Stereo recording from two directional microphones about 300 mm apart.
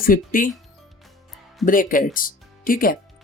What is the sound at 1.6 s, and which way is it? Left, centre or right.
Speech, left.